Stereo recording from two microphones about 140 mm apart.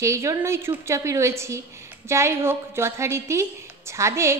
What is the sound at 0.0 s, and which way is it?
A woman's voice, 20° right (ahead or behind).